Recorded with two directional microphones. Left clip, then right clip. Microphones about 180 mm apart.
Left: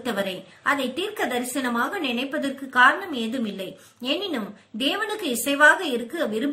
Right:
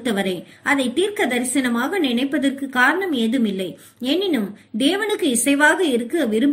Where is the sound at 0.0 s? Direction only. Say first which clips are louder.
Right 4 dB; 20° right (ahead or behind).